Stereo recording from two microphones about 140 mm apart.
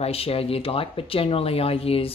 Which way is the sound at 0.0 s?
45° left (ahead or behind).